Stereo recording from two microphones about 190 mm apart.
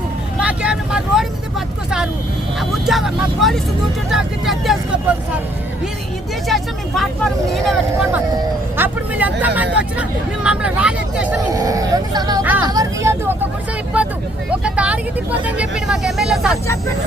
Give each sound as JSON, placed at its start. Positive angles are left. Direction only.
{"t": 0.3, "sound": "vehicle", "side_deg": -5}
{"t": 2.6, "sound": "speech", "side_deg": 0}
{"t": 6.5, "sound": "speech", "side_deg": 0}
{"t": 11.5, "sound": "speech", "side_deg": -20}
{"t": 12.6, "sound": "vehicle", "side_deg": -20}
{"t": 14.6, "sound": "speech", "side_deg": -5}